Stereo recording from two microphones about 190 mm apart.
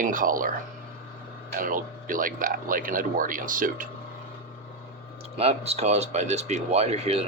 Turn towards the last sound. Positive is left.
turn(degrees=-35)  # may be behind; listen again after turning